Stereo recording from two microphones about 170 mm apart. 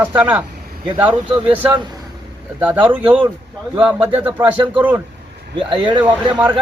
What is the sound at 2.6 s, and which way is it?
Speech, 10° right (ahead or behind).